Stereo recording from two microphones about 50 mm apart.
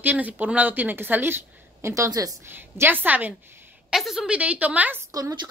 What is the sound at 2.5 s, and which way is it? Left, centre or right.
Speech, right.